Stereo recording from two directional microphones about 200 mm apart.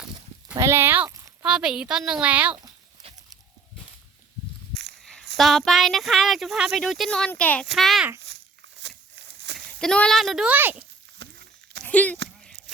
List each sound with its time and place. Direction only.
0.5 s speech: 15° right (ahead or behind)
4.7 s walk: 55° right (ahead or behind)
4.9 s a sound: centre (ahead or behind)
5.4 s speech: centre (ahead or behind)
9.1 s walk: 60° right (ahead or behind)
9.6 s speech: 5° left (ahead or behind)
11.2 s a sound: 55° right (ahead or behind)
11.9 s speech: 10° left (ahead or behind)